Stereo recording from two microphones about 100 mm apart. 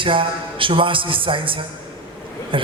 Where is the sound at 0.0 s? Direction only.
60° right (ahead or behind).